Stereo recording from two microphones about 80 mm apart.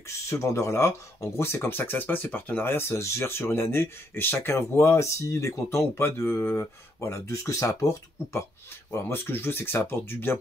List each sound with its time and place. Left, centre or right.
0.1 s speech: left
9.0 s speech: left